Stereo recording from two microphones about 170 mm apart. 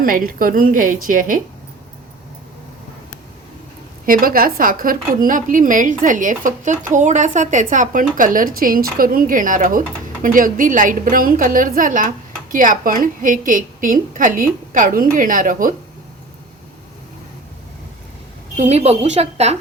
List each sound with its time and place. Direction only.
0.0 s a woman's voice: 55° right (ahead or behind)
4.0 s a woman's voice: 55° right (ahead or behind)
18.5 s a woman's voice: 40° right (ahead or behind)